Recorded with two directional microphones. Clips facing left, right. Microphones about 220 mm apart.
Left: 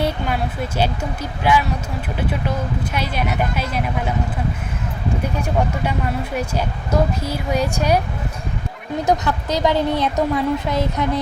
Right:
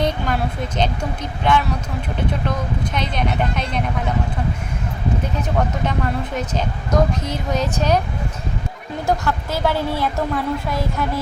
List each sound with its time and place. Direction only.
0.8 s speech: 5° left (ahead or behind)
2.8 s speech: 5° left (ahead or behind)
5.4 s speech: 10° left (ahead or behind)
9.0 s a woman's voice: 20° left (ahead or behind)